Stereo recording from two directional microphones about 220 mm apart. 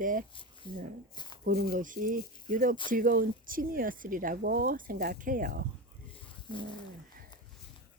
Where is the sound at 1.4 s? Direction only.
40° right (ahead or behind).